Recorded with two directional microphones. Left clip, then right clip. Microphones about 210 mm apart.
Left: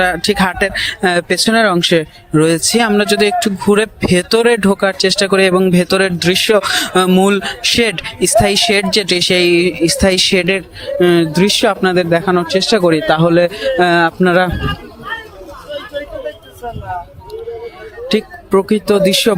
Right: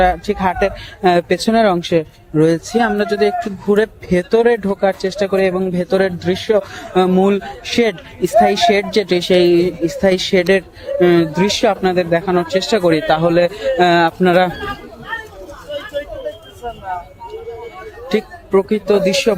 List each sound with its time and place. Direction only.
0.0 s speech: 25° left (ahead or behind)
16.0 s a sound: 45° left (ahead or behind)
18.1 s speech: 25° left (ahead or behind)